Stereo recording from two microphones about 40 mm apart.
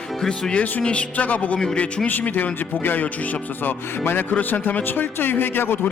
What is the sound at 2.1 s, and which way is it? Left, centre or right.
Speech, left.